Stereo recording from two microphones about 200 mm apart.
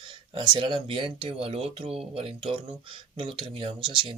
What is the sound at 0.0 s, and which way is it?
Speech, 25° right (ahead or behind).